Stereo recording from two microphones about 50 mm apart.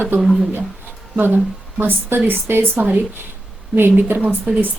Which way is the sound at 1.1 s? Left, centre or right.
Right.